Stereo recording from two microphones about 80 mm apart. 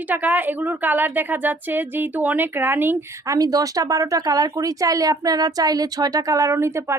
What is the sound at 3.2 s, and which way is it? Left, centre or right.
Speech, right.